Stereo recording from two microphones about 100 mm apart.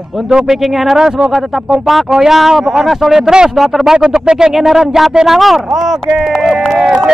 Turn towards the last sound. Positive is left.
turn(degrees=0)  # may be behind; listen again after turning